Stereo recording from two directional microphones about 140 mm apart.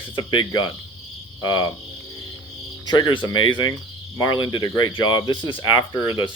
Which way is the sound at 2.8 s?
30° left (ahead or behind).